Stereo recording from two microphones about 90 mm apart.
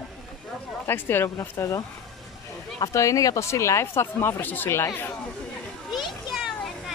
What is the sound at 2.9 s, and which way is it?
Speech, 40° left (ahead or behind).